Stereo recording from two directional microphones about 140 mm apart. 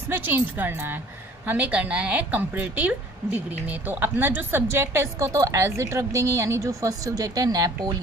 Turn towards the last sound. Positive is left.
turn(degrees=-25)  # may be behind; listen again after turning